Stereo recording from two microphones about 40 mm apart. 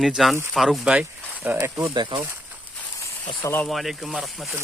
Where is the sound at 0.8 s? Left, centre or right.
Right.